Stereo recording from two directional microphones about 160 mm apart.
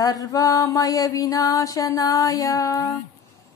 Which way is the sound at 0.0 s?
25° left (ahead or behind).